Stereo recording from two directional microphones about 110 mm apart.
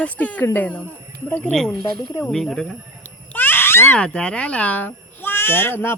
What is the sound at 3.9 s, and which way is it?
Speech, 10° left (ahead or behind).